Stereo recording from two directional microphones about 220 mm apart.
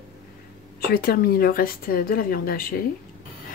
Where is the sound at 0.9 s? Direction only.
45° left (ahead or behind).